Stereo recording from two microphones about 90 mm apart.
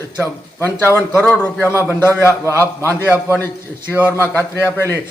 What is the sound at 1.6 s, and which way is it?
A man's voice, 25° left (ahead or behind).